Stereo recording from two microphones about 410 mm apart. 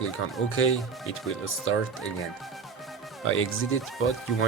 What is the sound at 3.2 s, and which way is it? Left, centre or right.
Speech, left.